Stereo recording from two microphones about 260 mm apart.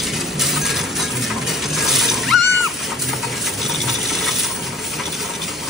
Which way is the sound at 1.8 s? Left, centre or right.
Centre.